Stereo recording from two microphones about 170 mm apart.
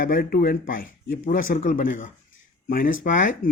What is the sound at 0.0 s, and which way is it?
Speech, 60° left (ahead or behind).